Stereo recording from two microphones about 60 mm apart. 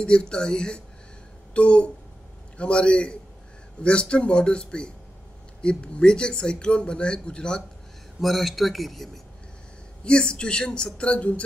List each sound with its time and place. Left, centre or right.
0.0 s speech: centre
8.2 s speech: centre
10.0 s speech: centre